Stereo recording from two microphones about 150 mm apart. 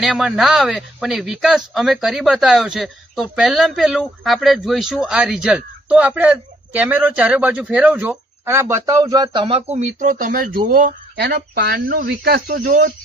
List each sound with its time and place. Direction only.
0.0 s speech: centre (ahead or behind); by 12.9 s 80° right